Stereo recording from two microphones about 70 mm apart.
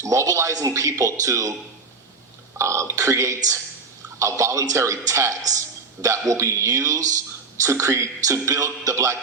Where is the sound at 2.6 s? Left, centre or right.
Right.